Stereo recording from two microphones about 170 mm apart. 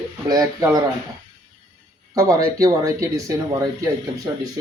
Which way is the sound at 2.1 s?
20° right (ahead or behind).